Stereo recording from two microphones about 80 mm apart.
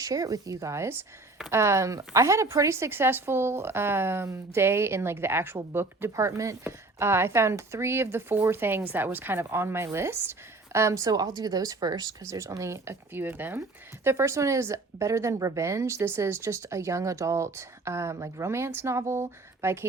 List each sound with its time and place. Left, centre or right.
0.0 s speech: right
11.3 s speech: right
12.2 s speech: right